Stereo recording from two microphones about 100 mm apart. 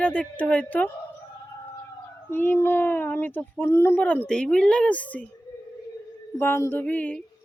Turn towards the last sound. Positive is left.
turn(degrees=15)  # may be behind; listen again after turning